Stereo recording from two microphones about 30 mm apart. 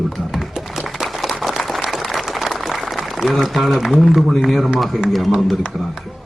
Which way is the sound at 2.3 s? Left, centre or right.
Centre.